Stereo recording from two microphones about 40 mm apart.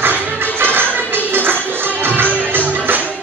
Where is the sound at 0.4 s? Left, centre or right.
Right.